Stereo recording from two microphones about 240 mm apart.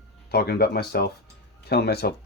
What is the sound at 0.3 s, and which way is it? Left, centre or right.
Speech, left.